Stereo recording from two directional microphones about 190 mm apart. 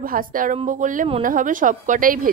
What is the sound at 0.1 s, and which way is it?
A woman's voice, 45° right (ahead or behind).